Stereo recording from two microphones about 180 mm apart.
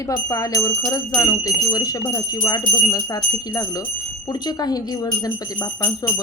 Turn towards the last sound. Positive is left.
turn(degrees=20)  # may be behind; listen again after turning